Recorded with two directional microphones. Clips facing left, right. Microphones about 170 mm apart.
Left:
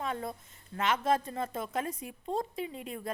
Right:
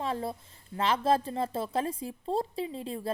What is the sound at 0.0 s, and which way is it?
A woman's voice, 30° right (ahead or behind).